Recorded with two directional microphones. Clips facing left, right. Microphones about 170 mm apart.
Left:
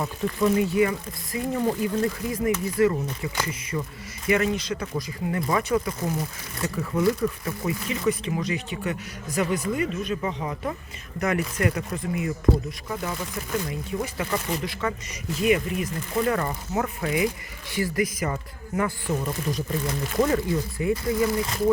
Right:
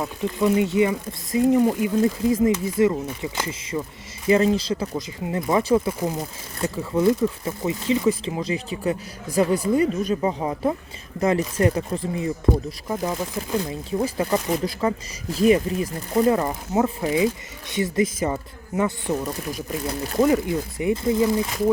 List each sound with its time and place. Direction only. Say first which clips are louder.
0.0 s speech: right 2 dB; 20° right (ahead or behind)
13.5 s speech: right 2 dB; 30° right (ahead or behind)
19.1 s speech: right 1 dB; 10° right (ahead or behind)